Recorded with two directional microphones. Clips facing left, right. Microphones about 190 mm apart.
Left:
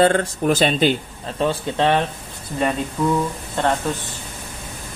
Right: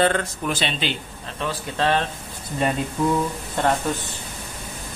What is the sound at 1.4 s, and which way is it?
Speech, 25° left (ahead or behind).